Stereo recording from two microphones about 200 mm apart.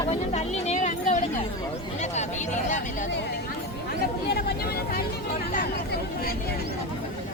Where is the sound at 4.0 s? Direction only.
50° left (ahead or behind).